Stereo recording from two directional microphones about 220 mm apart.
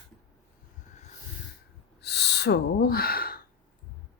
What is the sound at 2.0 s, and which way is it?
Owl, 50° left (ahead or behind).